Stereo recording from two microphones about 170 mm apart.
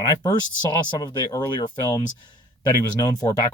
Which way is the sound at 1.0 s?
25° left (ahead or behind).